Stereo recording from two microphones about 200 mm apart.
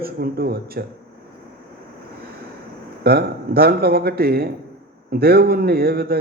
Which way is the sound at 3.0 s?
50° right (ahead or behind).